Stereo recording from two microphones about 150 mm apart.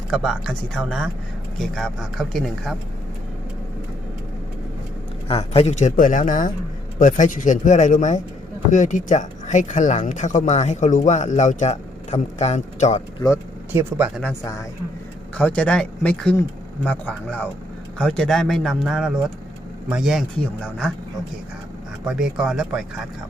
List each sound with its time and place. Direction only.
0.1 s speech: centre (ahead or behind)
5.3 s speech: 40° left (ahead or behind)
15.4 s speech: 10° left (ahead or behind)
22.0 s speech: 5° right (ahead or behind)